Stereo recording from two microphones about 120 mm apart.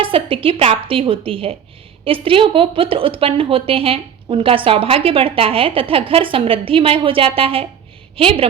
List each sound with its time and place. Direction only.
0.0 s speech: 50° right (ahead or behind)